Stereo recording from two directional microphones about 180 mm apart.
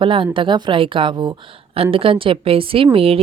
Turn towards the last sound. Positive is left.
turn(degrees=-30)  # may be behind; listen again after turning